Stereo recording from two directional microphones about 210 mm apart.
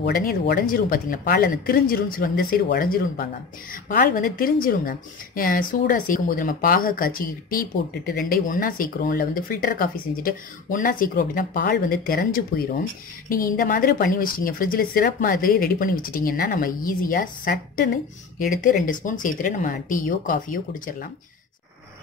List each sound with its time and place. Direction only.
0.0 s a woman's voice: 45° left (ahead or behind)